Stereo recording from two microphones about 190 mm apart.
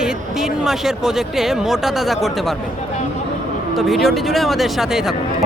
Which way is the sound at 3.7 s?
Centre (ahead or behind).